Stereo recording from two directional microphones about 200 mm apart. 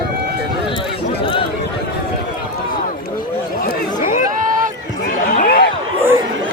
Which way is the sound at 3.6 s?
40° left (ahead or behind).